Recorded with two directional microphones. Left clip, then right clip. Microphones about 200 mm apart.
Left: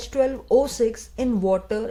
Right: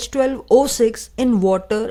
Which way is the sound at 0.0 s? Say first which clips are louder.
Right 3 dB; 30° right (ahead or behind).